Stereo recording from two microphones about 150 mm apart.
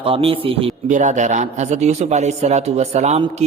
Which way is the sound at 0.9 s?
55° right (ahead or behind).